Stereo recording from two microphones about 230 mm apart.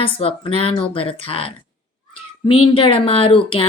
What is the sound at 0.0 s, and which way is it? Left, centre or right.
A woman's voice, left.